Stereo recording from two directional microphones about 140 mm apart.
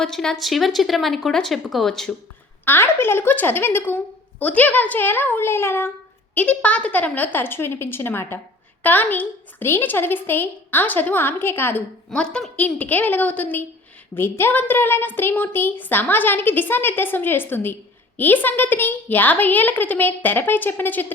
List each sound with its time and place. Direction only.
0.0 s speech: 5° left (ahead or behind)
2.6 s a woman's voice: 15° left (ahead or behind)